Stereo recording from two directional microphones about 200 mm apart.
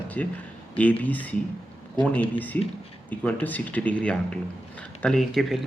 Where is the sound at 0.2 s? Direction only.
5° left (ahead or behind).